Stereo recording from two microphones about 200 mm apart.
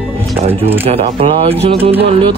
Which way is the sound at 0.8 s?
30° right (ahead or behind).